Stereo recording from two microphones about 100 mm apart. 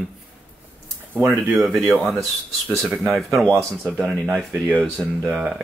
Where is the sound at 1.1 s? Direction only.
20° right (ahead or behind).